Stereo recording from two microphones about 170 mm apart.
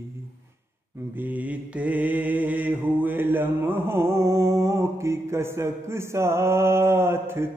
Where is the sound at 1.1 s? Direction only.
10° right (ahead or behind).